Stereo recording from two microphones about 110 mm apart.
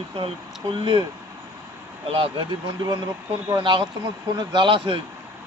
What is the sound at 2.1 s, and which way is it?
Speech, 55° right (ahead or behind).